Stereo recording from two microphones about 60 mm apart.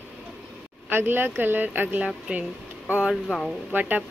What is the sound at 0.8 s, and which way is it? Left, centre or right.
Speech, right.